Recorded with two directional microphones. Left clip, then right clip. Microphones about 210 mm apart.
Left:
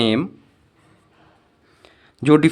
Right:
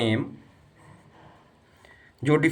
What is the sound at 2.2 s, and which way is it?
Speech, 55° left (ahead or behind).